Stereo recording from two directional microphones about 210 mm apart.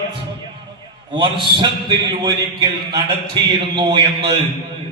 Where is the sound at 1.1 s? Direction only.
25° right (ahead or behind).